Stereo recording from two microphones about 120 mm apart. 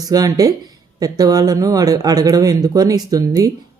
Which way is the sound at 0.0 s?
30° right (ahead or behind).